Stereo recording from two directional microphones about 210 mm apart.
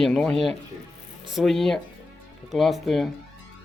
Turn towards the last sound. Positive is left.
turn(degrees=0)  # may be behind; listen again after turning